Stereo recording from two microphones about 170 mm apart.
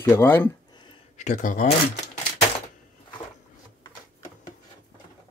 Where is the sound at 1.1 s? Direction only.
45° left (ahead or behind).